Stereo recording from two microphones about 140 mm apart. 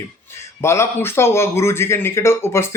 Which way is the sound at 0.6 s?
20° left (ahead or behind).